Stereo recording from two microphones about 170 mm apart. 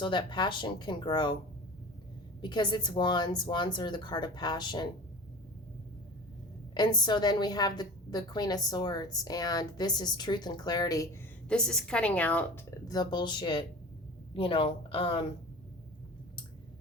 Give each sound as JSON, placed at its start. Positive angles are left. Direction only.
{"t": 0.0, "sound": "a woman's voice", "side_deg": 30}
{"t": 2.4, "sound": "a woman's voice", "side_deg": 25}
{"t": 6.7, "sound": "a woman's voice", "side_deg": 25}
{"t": 11.4, "sound": "a woman's voice", "side_deg": 5}
{"t": 12.9, "sound": "a woman's voice", "side_deg": 25}